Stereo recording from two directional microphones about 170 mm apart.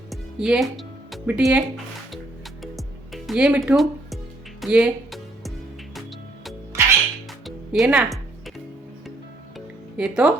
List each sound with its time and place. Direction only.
0.1 s music: 5° right (ahead or behind)
6.7 s music: 15° right (ahead or behind)
7.3 s music: centre (ahead or behind)
10.0 s speech: 5° right (ahead or behind)